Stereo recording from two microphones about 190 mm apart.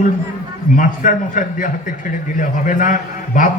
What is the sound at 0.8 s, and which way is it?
A man's voice, 45° left (ahead or behind).